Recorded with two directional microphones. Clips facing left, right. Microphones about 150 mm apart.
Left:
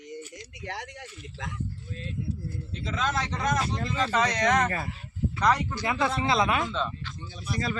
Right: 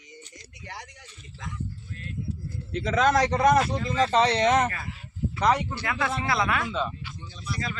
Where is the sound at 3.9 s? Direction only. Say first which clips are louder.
Right 5 dB; 35° right (ahead or behind).